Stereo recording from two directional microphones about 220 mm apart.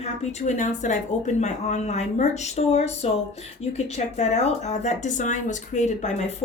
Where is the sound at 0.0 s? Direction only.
30° left (ahead or behind).